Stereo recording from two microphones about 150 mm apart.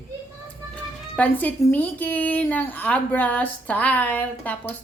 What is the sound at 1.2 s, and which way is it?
A woman's voice, 10° left (ahead or behind).